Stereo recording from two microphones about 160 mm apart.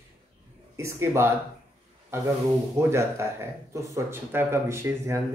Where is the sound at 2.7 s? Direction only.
15° right (ahead or behind).